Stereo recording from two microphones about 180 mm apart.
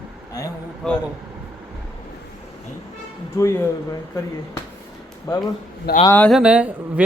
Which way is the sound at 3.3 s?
15° left (ahead or behind).